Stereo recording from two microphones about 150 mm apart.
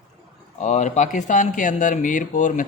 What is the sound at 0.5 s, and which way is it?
Speech, 50° left (ahead or behind).